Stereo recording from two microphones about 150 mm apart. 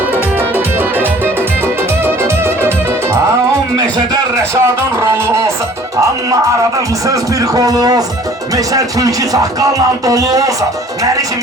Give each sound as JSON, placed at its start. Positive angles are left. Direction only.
{"t": 0.3, "sound": "music", "side_deg": -10}
{"t": 4.1, "sound": "a sound", "side_deg": -20}
{"t": 7.1, "sound": "music", "side_deg": -25}